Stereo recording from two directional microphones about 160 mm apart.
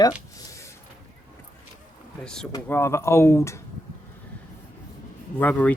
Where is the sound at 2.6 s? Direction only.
15° left (ahead or behind).